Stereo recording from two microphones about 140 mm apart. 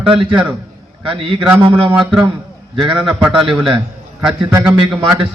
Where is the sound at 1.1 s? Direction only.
40° right (ahead or behind).